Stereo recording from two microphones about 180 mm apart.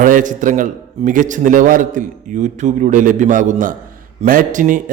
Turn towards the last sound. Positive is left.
turn(degrees=-45)  # may be behind; listen again after turning